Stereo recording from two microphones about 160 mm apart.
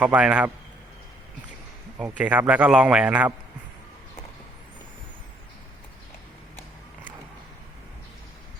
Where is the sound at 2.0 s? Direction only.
10° right (ahead or behind).